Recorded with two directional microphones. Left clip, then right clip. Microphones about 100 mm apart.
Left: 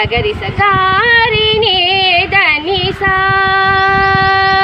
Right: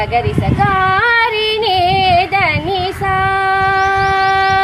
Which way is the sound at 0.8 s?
60° right (ahead or behind).